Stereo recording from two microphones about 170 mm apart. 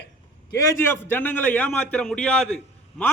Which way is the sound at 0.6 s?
15° left (ahead or behind).